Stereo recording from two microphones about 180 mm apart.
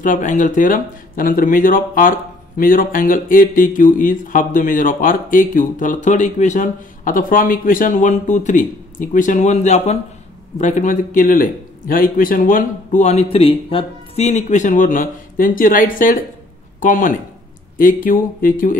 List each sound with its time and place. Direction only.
0.0 s speech: 45° left (ahead or behind)